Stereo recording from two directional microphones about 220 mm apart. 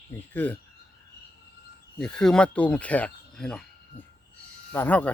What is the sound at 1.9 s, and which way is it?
Speech, 5° left (ahead or behind).